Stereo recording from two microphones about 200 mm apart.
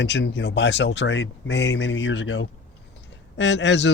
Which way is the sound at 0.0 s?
60° left (ahead or behind).